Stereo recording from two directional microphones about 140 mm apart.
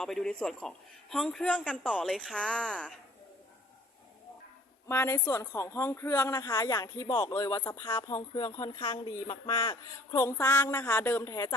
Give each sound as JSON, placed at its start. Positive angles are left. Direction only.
{"t": 0.0, "sound": "a man's voice", "side_deg": 5}
{"t": 4.9, "sound": "speech", "side_deg": 20}
{"t": 6.4, "sound": "speech", "side_deg": 30}
{"t": 8.1, "sound": "speech", "side_deg": 20}
{"t": 9.5, "sound": "a man's voice", "side_deg": 35}
{"t": 10.2, "sound": "speech", "side_deg": 15}